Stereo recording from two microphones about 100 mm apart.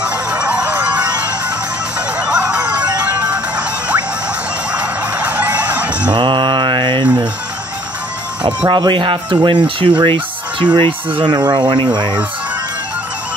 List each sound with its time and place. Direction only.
0.0 s music: 10° right (ahead or behind)
6.1 s mantra: 55° right (ahead or behind)
8.6 s speech: 50° right (ahead or behind)
11.3 s speech: 45° right (ahead or behind)